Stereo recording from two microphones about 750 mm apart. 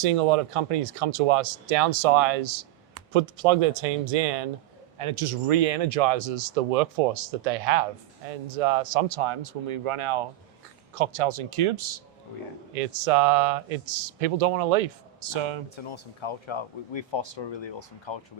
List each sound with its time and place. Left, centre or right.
0.0 s speech: right
4.9 s speech: right
15.3 s speech: right
15.7 s speech: left